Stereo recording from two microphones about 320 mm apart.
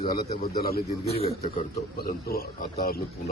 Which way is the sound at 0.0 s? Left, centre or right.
Left.